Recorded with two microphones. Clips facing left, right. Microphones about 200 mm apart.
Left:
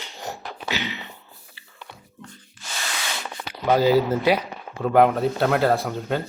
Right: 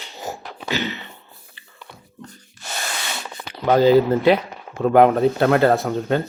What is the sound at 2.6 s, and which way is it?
Rub, 40° right (ahead or behind).